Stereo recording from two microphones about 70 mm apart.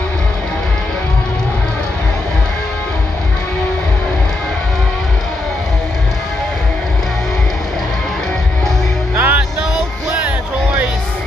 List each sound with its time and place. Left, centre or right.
9.1 s music: right